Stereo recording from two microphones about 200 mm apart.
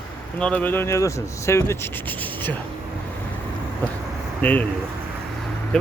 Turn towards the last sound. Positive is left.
turn(degrees=10)  # may be behind; listen again after turning